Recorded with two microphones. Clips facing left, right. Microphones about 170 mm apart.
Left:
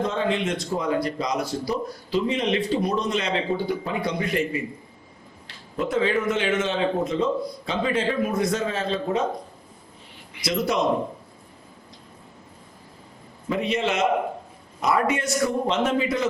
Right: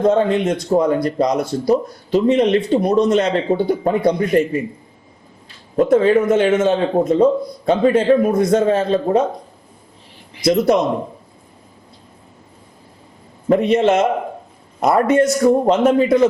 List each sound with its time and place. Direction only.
0.0 s a man's voice: 45° right (ahead or behind)
5.7 s a man's voice: 45° right (ahead or behind)
10.4 s a man's voice: 45° right (ahead or behind)
13.5 s a man's voice: 45° right (ahead or behind)